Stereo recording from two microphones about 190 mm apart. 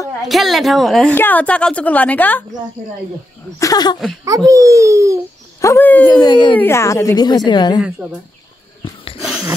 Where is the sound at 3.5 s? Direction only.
20° left (ahead or behind).